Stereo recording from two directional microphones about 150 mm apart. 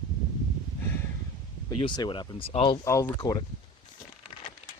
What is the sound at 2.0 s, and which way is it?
Speech, 30° left (ahead or behind).